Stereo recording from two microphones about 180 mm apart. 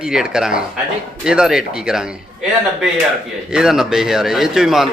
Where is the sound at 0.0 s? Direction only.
5° right (ahead or behind).